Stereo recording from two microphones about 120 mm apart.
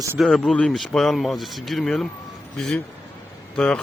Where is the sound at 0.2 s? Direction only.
5° left (ahead or behind).